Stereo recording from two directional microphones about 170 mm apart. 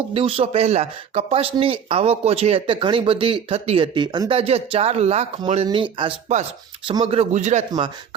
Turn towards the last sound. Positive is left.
turn(degrees=-45)  # may be behind; listen again after turning